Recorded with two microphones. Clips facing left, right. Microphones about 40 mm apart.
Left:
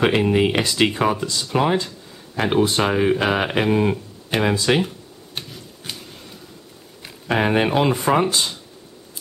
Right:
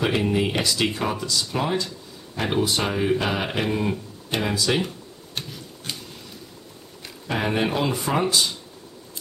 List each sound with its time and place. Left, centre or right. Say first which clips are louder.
0.0 s speech: left 5 dB; left
4.8 s a sound: left 1 dB; centre
7.2 s speech: left 5 dB; left